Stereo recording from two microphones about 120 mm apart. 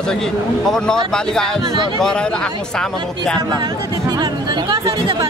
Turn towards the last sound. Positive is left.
turn(degrees=-35)  # may be behind; listen again after turning